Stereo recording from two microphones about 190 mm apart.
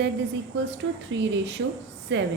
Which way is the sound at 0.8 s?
90° right.